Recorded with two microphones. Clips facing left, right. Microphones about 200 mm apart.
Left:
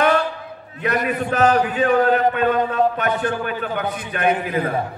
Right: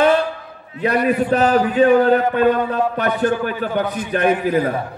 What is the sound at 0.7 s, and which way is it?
A man's voice, 30° right (ahead or behind).